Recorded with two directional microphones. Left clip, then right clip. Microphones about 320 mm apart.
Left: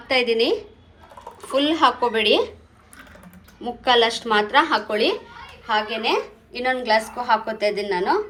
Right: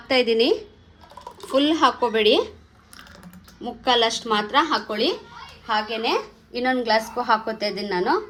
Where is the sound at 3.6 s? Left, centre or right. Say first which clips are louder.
Left 2 dB; right.